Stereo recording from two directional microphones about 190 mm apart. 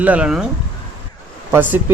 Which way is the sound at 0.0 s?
5° right (ahead or behind).